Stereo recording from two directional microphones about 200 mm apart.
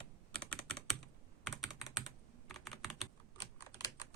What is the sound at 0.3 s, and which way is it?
Computer keyboard, 5° left (ahead or behind).